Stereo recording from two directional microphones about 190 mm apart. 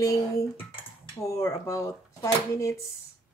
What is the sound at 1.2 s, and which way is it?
Speech, 15° left (ahead or behind).